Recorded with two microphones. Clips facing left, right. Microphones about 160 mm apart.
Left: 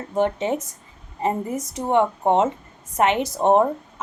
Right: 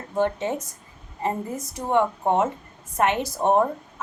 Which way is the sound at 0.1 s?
20° left (ahead or behind).